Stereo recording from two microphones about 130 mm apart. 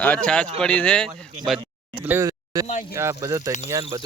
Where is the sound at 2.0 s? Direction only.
15° right (ahead or behind).